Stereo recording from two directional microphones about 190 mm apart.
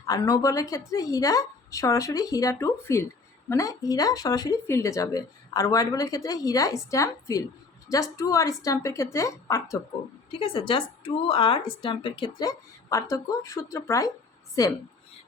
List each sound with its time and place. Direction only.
0.0 s a woman's voice: 15° left (ahead or behind)
10.3 s a woman's voice: 30° left (ahead or behind)